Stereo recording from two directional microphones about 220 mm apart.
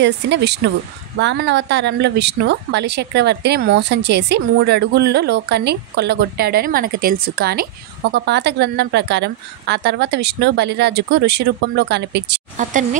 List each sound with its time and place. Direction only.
0.0 s speech: 50° right (ahead or behind)